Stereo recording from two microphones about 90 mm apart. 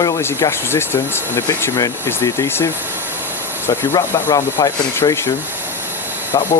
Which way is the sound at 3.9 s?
40° left (ahead or behind).